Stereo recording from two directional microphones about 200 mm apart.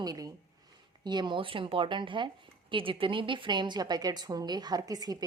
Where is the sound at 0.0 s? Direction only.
20° right (ahead or behind).